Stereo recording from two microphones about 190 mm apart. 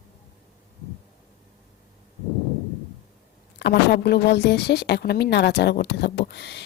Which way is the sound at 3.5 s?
60° left (ahead or behind).